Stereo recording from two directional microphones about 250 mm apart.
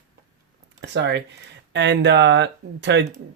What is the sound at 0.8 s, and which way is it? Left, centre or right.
Speech, right.